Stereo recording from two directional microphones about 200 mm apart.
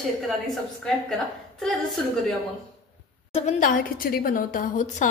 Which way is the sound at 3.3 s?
40° left (ahead or behind).